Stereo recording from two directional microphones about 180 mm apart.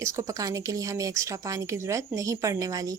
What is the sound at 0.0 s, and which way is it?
Speech, 20° right (ahead or behind).